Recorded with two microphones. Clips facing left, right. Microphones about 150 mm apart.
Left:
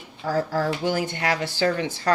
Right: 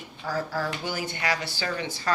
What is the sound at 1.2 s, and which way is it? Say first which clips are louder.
Speech: left 6 dB; 55° left (ahead or behind).